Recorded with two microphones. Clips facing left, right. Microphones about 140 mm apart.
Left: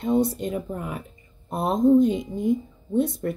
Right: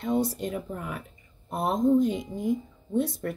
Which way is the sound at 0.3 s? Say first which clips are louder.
Left 4 dB; 25° left (ahead or behind).